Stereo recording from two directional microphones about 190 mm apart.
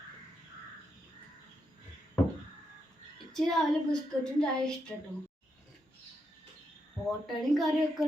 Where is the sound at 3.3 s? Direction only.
Centre (ahead or behind).